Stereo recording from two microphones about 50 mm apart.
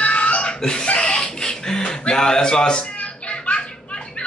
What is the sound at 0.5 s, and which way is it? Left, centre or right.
Chuckle, centre.